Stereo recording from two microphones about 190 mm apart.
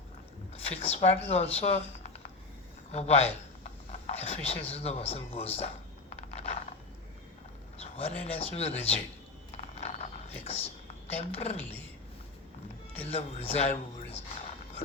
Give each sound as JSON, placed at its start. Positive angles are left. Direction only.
{"t": 0.5, "sound": "speech", "side_deg": 30}
{"t": 2.9, "sound": "a sound", "side_deg": 35}
{"t": 7.8, "sound": "speech", "side_deg": 35}
{"t": 9.7, "sound": "a sound", "side_deg": 35}
{"t": 11.1, "sound": "a man's voice", "side_deg": 30}
{"t": 13.1, "sound": "a man's voice", "side_deg": 30}